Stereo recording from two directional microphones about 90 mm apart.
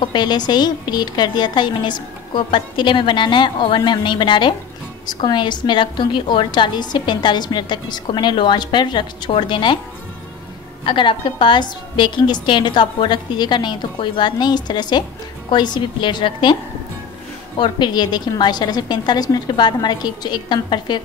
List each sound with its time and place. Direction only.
0.0 s a woman's voice: 55° left (ahead or behind)
5.0 s a woman's voice: 50° left (ahead or behind)
10.9 s a woman's voice: 65° left (ahead or behind)
17.6 s a woman's voice: 60° left (ahead or behind)